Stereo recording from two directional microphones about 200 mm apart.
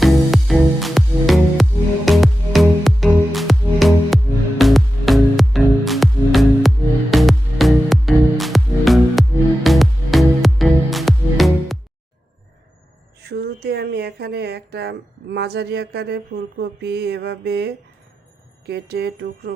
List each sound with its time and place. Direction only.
0.0 s music: centre (ahead or behind)
13.2 s speech: 55° right (ahead or behind)
18.6 s music: 55° right (ahead or behind)